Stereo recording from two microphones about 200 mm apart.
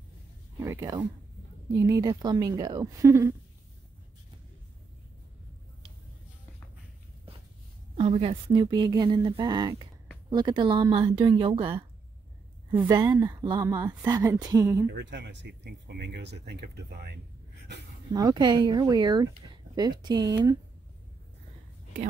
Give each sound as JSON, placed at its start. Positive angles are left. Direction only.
{"t": 0.6, "sound": "speech", "side_deg": -15}
{"t": 8.0, "sound": "speech", "side_deg": -30}
{"t": 12.7, "sound": "speech", "side_deg": -15}
{"t": 15.0, "sound": "speech", "side_deg": -60}
{"t": 18.1, "sound": "speech", "side_deg": -20}